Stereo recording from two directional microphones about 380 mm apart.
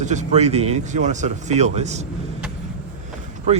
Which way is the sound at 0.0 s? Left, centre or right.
Centre.